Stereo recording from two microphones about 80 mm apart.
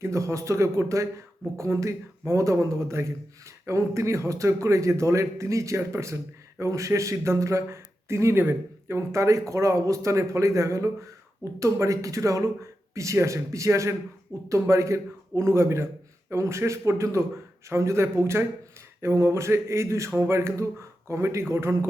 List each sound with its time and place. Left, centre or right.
0.0 s speech: right